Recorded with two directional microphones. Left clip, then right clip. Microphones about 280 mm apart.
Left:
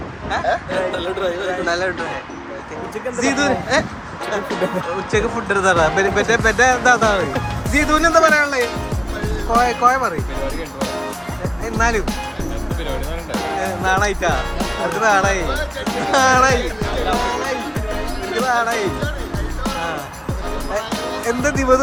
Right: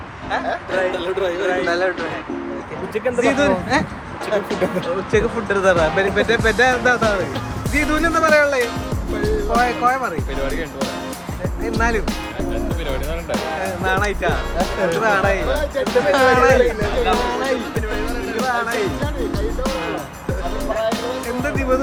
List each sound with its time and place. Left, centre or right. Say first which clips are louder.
0.9 s speech: even; centre
3.2 s speech: left 1 dB; centre
13.8 s speech: left 2 dB; centre
21.4 s speech: left 5 dB; centre